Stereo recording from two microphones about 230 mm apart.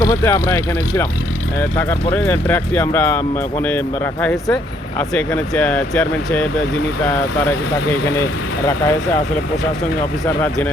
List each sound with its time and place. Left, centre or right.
0.0 s speech: centre